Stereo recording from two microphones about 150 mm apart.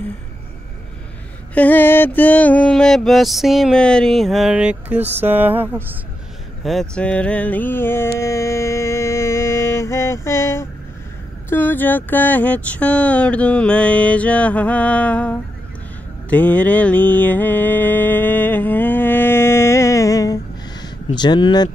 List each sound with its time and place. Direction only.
1.5 s mantra: 10° left (ahead or behind); by 5.9 s 15° right (ahead or behind)
6.6 s mantra: centre (ahead or behind)
8.2 s music: 20° left (ahead or behind)
11.4 s mantra: 15° left (ahead or behind)
21.1 s speech: 30° left (ahead or behind)